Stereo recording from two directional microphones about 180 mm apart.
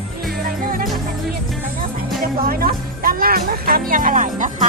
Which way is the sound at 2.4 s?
55° right (ahead or behind).